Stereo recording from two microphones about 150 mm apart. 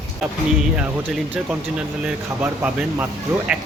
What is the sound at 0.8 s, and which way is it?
A man's voice, 10° right (ahead or behind).